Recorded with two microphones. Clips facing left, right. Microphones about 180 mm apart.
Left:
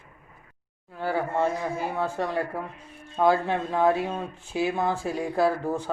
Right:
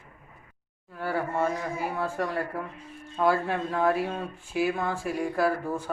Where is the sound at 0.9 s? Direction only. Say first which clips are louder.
Left 2 dB; 20° left (ahead or behind).